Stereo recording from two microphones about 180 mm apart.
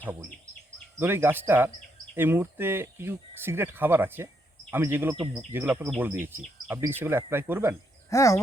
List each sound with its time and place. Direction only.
0.0 s speech: 15° right (ahead or behind)
8.1 s speech: 15° left (ahead or behind)